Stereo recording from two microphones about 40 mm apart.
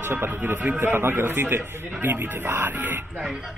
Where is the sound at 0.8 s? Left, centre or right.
Right.